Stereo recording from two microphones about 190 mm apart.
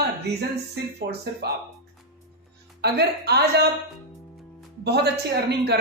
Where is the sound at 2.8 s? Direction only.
60° right (ahead or behind).